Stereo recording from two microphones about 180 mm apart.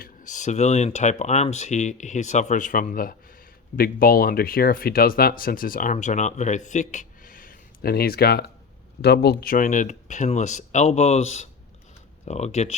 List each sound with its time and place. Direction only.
0.0 s speech: 45° left (ahead or behind)